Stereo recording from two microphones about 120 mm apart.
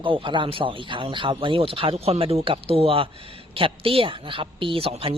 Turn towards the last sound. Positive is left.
turn(degrees=-50)  # may be behind; listen again after turning